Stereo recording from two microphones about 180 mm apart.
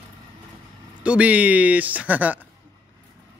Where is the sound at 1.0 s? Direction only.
5° right (ahead or behind).